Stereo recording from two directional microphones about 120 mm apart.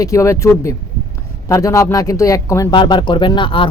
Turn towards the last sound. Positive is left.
turn(degrees=45)  # may be behind; listen again after turning